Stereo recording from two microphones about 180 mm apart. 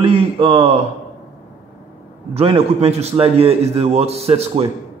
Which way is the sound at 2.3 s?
35° right (ahead or behind).